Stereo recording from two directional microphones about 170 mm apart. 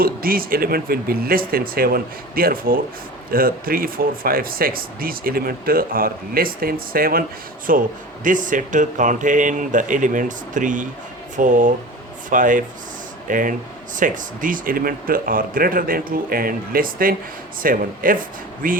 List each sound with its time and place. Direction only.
0.0 s speech: 60° right (ahead or behind)